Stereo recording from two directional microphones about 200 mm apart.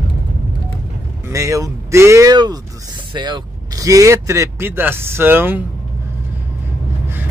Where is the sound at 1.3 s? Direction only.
15° right (ahead or behind).